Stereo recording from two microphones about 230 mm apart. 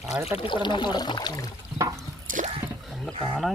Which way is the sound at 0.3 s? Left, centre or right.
Left.